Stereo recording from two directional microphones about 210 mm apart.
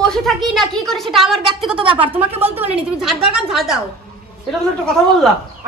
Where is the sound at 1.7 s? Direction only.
25° right (ahead or behind).